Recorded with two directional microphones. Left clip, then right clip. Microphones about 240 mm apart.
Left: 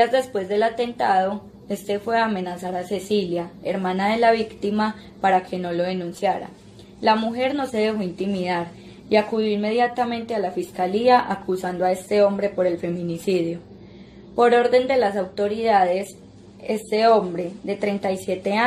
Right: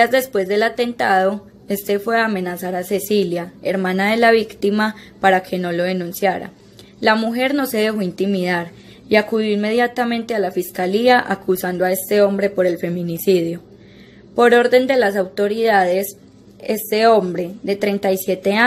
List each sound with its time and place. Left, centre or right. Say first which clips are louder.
0.0 s a woman's voice: right 4 dB; right